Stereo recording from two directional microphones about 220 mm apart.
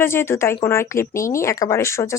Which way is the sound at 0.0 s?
10° left (ahead or behind).